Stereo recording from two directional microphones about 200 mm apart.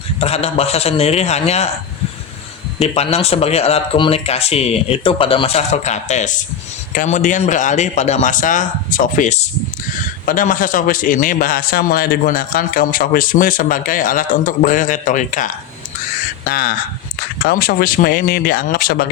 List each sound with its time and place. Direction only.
0.2 s speech: 30° left (ahead or behind)
2.7 s a man's voice: 30° left (ahead or behind)
16.5 s a man's voice: 45° left (ahead or behind)